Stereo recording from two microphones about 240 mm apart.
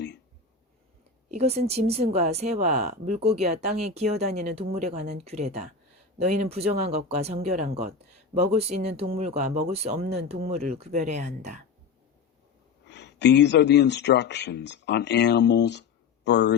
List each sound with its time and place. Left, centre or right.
1.3 s speech: right
12.9 s speech: left